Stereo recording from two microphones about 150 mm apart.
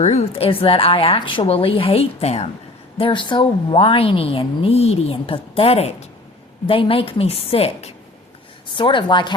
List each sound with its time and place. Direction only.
0.0 s a woman's voice: 45° left (ahead or behind)
3.0 s a woman's voice: 35° left (ahead or behind)